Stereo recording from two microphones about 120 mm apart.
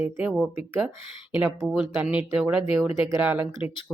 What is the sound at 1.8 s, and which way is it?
Speech, 10° right (ahead or behind).